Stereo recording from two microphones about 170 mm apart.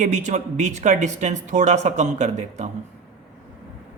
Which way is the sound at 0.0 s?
45° right (ahead or behind).